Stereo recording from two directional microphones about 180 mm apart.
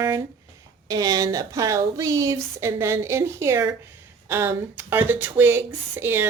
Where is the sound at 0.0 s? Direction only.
20° right (ahead or behind).